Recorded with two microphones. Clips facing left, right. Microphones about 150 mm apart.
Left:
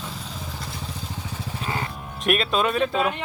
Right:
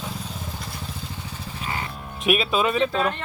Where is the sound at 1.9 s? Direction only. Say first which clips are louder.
Right 2 dB; centre (ahead or behind).